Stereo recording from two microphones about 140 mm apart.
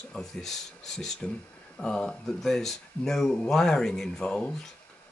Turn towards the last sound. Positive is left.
turn(degrees=5)  # may be behind; listen again after turning